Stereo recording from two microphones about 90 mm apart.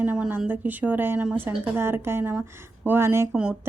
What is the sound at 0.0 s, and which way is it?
A woman's voice, 20° right (ahead or behind).